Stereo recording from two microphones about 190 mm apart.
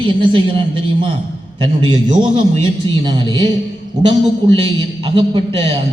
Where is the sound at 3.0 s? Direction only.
25° right (ahead or behind).